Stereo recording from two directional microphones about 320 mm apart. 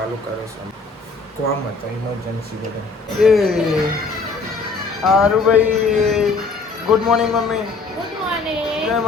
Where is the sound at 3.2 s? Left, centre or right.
Centre.